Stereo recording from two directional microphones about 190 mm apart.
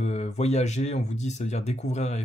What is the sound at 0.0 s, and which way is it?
Speech, 35° left (ahead or behind).